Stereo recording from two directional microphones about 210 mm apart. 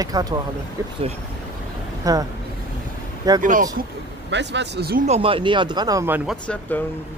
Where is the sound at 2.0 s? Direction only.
15° right (ahead or behind).